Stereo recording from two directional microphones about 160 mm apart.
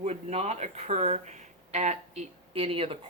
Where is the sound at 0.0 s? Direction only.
40° right (ahead or behind).